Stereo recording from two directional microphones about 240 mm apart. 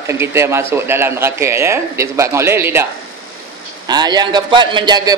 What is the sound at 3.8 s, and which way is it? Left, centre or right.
Speech, centre.